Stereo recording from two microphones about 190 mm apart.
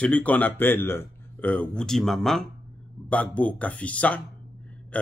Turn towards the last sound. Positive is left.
turn(degrees=5)  # may be behind; listen again after turning